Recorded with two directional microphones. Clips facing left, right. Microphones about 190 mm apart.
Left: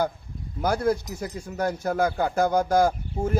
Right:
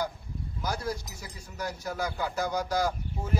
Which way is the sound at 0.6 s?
55° left (ahead or behind).